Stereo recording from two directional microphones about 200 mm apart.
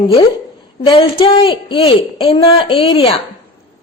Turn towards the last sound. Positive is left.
turn(degrees=25)  # may be behind; listen again after turning